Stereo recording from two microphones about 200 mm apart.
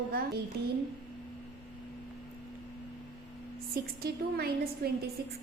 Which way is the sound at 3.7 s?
50° right (ahead or behind).